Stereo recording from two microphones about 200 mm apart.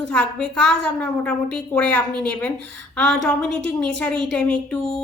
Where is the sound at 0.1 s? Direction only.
5° left (ahead or behind).